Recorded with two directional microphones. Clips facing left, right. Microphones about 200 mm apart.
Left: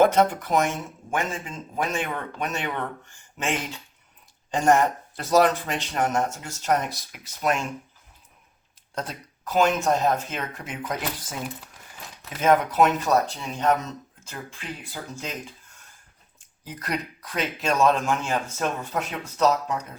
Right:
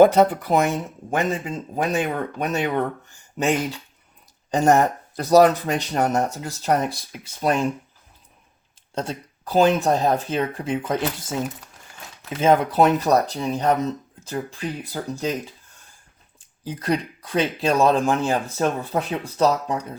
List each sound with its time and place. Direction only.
0.1 s speech: 35° right (ahead or behind)
4.5 s speech: 40° right (ahead or behind)
9.0 s speech: 30° right (ahead or behind)
12.4 s speech: 30° right (ahead or behind)
16.6 s speech: 30° right (ahead or behind)